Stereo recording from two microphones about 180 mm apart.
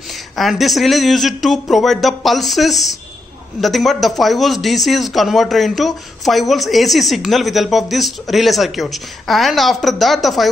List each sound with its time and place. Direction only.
0.4 s speech: centre (ahead or behind)